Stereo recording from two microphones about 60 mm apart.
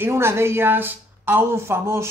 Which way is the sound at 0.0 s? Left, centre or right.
Right.